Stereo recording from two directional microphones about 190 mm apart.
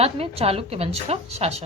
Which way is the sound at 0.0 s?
30° right (ahead or behind).